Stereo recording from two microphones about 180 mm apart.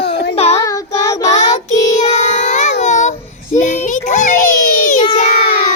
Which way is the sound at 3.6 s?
45° left (ahead or behind).